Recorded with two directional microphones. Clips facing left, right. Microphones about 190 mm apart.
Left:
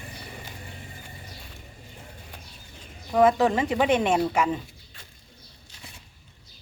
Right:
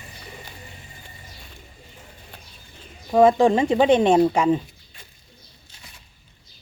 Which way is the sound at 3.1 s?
30° right (ahead or behind).